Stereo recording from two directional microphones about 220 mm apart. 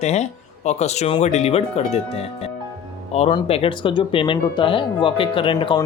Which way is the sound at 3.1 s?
25° left (ahead or behind).